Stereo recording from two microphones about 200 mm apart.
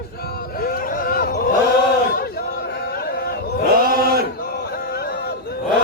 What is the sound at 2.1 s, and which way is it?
Chatter, 50° left (ahead or behind).